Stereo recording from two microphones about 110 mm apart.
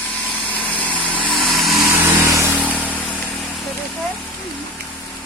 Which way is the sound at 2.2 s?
25° right (ahead or behind).